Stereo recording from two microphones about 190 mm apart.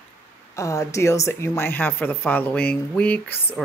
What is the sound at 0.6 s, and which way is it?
Speech, 15° left (ahead or behind).